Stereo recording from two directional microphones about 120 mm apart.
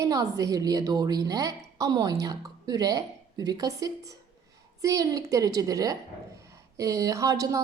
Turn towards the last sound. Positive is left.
turn(degrees=-30)  # may be behind; listen again after turning